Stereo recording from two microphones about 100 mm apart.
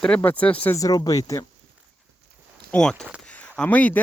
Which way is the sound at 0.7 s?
40° left (ahead or behind).